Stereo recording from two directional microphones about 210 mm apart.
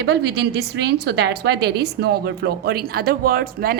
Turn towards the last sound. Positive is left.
turn(degrees=-45)  # may be behind; listen again after turning